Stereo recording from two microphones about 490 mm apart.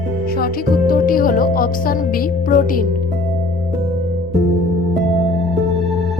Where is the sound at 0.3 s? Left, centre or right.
Centre.